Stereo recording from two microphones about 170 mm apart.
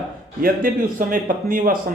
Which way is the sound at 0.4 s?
55° right (ahead or behind).